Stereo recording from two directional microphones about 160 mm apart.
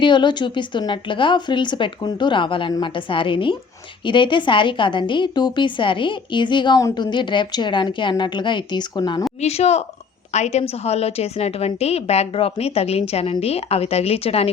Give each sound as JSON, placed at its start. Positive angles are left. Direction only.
{"t": 0.0, "sound": "a woman's voice", "side_deg": 30}
{"t": 9.4, "sound": "a woman's voice", "side_deg": 40}